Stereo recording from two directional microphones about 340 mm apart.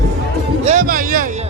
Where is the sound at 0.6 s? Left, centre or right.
Right.